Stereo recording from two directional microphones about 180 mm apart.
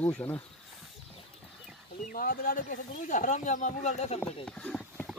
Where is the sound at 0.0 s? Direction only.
10° left (ahead or behind).